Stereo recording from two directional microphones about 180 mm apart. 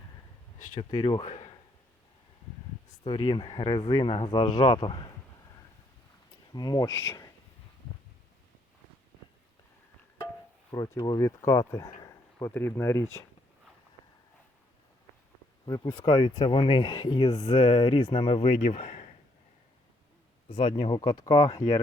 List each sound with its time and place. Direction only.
0.8 s speech: 25° left (ahead or behind)
1.2 s a man's voice: 40° left (ahead or behind)
3.0 s speech: 25° left (ahead or behind)
6.5 s speech: 20° left (ahead or behind)
10.7 s speech: 25° left (ahead or behind)
11.9 s a sound: 15° left (ahead or behind)
15.6 s speech: 25° left (ahead or behind)
20.5 s speech: 30° left (ahead or behind)